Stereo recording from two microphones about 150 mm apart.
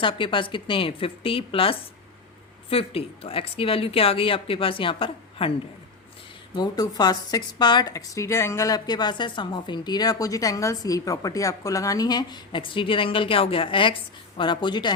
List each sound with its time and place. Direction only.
0.0 s speech: 35° left (ahead or behind)
6.5 s speech: 25° left (ahead or behind)